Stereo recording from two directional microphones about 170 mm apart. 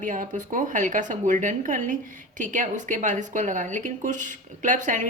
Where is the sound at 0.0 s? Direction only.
50° right (ahead or behind).